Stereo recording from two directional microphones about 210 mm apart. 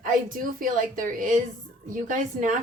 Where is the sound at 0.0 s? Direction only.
40° right (ahead or behind).